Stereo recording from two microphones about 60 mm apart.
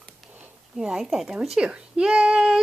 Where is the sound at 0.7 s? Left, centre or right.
Centre.